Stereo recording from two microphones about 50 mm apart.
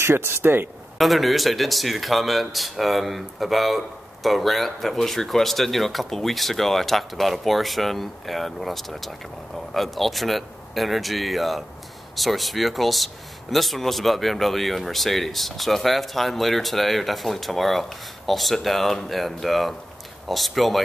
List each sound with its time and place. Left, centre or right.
0.0 s speech: right
0.9 s a man's voice: centre